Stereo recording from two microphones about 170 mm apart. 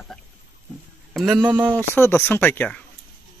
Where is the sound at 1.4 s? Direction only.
25° right (ahead or behind).